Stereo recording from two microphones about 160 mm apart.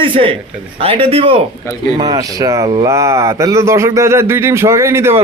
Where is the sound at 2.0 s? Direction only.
25° right (ahead or behind).